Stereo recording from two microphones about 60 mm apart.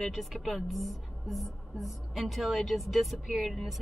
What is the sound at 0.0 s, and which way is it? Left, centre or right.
A woman's voice, centre.